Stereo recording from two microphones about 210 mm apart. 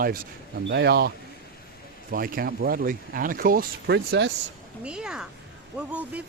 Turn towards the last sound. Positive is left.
turn(degrees=-5)  # may be behind; listen again after turning